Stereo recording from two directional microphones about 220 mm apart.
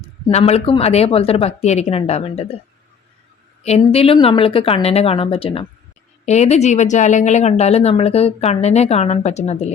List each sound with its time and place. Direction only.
0.0 s a woman's voice: 30° left (ahead or behind)
3.6 s a woman's voice: 30° left (ahead or behind)